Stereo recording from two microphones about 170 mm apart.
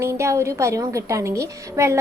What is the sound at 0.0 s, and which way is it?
A woman's voice, 15° right (ahead or behind).